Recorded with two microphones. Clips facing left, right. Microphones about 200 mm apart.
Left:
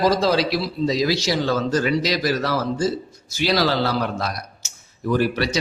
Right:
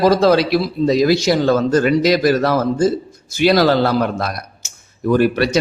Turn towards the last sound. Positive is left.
turn(degrees=-55)  # may be behind; listen again after turning